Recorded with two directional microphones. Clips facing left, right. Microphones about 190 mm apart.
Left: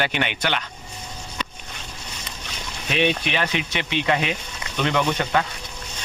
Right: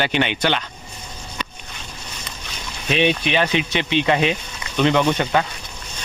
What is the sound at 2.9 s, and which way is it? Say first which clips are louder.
A man's voice: right 3 dB; 25° right (ahead or behind).